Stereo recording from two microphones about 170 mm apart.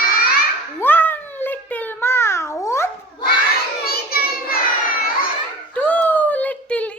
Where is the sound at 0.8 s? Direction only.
10° left (ahead or behind).